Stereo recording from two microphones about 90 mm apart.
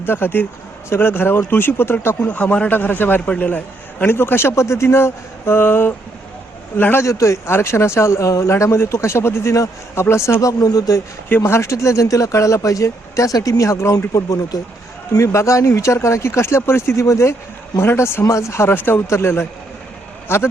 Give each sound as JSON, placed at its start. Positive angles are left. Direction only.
{"t": 0.0, "sound": "speech", "side_deg": 25}
{"t": 11.3, "sound": "a man's voice", "side_deg": 25}